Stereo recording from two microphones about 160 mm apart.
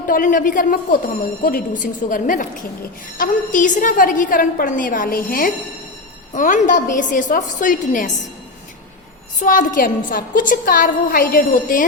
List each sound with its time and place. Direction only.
0.1 s a woman's voice: 55° left (ahead or behind)
6.3 s a woman's voice: 55° left (ahead or behind)
9.4 s a woman's voice: 55° left (ahead or behind)